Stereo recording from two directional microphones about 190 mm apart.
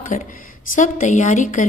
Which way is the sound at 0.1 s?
45° left (ahead or behind).